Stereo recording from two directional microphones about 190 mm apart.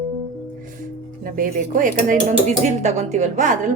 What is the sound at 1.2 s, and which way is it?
A woman's voice, 45° right (ahead or behind).